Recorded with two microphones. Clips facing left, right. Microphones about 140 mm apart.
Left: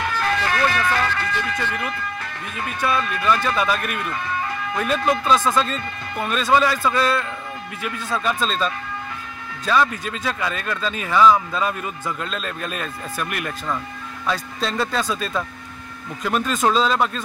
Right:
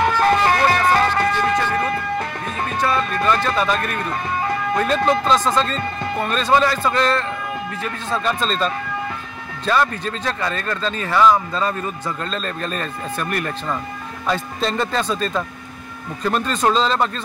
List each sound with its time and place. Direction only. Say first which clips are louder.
0.0 s music: right 7 dB; 45° right (ahead or behind)
2.8 s speech: right 2 dB; 5° left (ahead or behind)
4.8 s speech: right 1 dB; 30° right (ahead or behind)
6.2 s a man's voice: right 1 dB; 5° left (ahead or behind)
9.7 s a man's voice: right 1 dB; 5° left (ahead or behind)